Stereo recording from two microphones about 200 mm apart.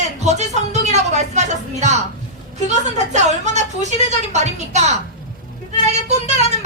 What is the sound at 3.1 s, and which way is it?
A woman's voice, 35° right (ahead or behind).